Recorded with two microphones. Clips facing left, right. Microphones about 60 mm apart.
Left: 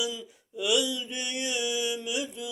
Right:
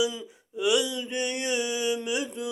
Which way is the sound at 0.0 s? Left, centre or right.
Right.